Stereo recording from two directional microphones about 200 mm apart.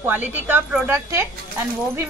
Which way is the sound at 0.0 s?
10° right (ahead or behind).